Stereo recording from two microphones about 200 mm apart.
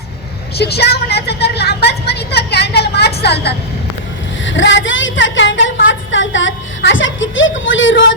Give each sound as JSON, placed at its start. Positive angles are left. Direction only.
{"t": 0.5, "sound": "a woman's voice", "side_deg": 55}
{"t": 4.4, "sound": "a woman's voice", "side_deg": 65}